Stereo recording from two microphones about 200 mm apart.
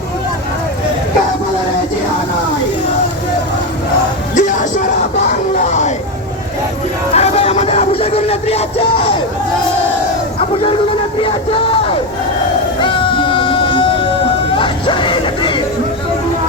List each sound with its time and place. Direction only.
4.4 s music: 40° left (ahead or behind)
5.3 s a sound: 35° left (ahead or behind)
7.1 s music: 30° left (ahead or behind)
11.2 s music: 25° left (ahead or behind)
14.5 s vehicle: 25° left (ahead or behind)